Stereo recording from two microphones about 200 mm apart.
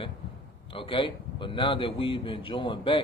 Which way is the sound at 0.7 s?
25° left (ahead or behind).